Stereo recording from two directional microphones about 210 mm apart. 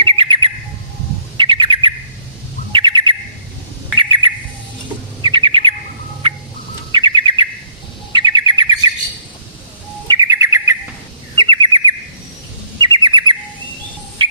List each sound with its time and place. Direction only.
0.0 s bird: 25° right (ahead or behind)
6.9 s bird: 20° right (ahead or behind)
10.1 s bird: 15° right (ahead or behind)